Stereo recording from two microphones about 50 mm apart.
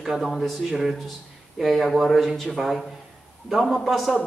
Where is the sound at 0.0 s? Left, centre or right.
Centre.